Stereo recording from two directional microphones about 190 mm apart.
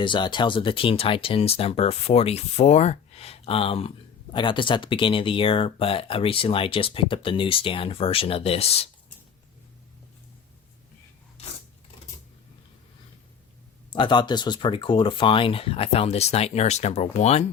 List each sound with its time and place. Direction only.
0.0 s speech: 25° left (ahead or behind)
13.9 s speech: 25° left (ahead or behind)